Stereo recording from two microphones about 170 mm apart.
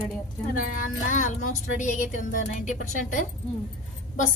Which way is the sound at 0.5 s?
50° left (ahead or behind).